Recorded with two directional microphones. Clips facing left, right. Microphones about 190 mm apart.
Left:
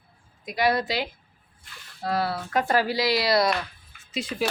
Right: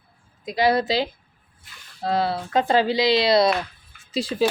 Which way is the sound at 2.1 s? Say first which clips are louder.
Right 4 dB; 25° right (ahead or behind).